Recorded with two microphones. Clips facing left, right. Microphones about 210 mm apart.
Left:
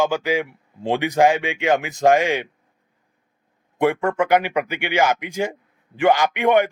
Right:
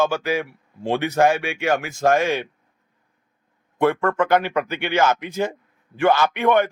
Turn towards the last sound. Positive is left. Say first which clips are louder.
# left 1 dB
turn(degrees=15)  # may be behind; listen again after turning